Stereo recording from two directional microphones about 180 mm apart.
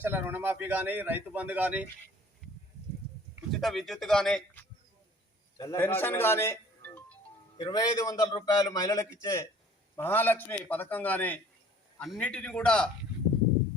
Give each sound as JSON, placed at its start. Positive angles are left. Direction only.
{"t": 0.0, "sound": "a man's voice", "side_deg": -10}
{"t": 3.5, "sound": "speech", "side_deg": 0}
{"t": 5.5, "sound": "a man's voice", "side_deg": 15}